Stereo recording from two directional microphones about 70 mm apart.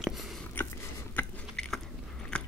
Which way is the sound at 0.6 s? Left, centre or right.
Left.